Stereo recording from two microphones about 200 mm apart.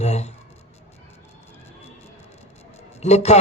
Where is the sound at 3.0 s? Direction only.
35° left (ahead or behind).